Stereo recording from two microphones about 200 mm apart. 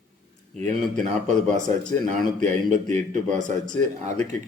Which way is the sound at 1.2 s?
35° right (ahead or behind).